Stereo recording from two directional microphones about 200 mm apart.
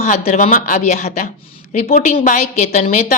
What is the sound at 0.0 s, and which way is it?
A woman's voice, 35° left (ahead or behind).